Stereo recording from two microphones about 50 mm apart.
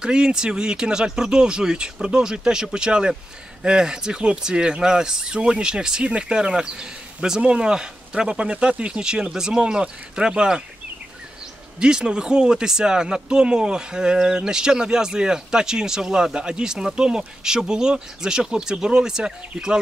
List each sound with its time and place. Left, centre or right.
0.0 s speech: centre
11.8 s speech: centre